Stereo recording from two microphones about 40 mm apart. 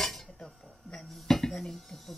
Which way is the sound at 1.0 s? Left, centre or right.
Centre.